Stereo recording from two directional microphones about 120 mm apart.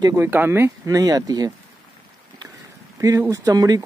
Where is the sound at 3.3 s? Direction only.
30° right (ahead or behind).